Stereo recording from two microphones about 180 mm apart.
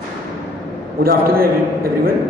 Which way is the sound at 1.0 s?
55° right (ahead or behind).